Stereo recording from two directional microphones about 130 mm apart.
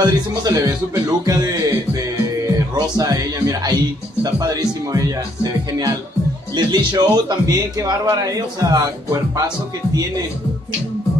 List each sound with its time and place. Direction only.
0.0 s a man's voice: 30° right (ahead or behind)
2.7 s a man's voice: 25° right (ahead or behind)